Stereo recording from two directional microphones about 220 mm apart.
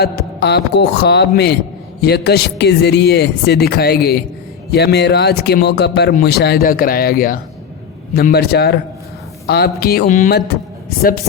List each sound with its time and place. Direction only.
0.0 s speech: 45° left (ahead or behind)